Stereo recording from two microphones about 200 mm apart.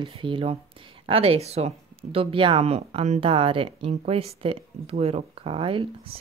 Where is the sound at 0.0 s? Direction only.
25° right (ahead or behind).